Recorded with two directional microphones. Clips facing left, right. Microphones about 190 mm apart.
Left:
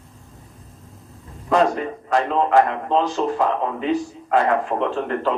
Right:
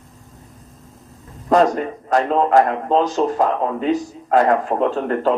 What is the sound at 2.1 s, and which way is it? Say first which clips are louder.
A man's voice: right 3 dB; 40° right (ahead or behind).